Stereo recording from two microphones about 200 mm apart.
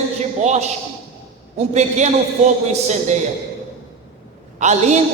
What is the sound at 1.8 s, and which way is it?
A man's voice, 35° right (ahead or behind).